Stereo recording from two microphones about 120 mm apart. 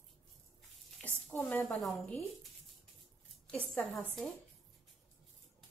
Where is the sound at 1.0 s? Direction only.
20° left (ahead or behind).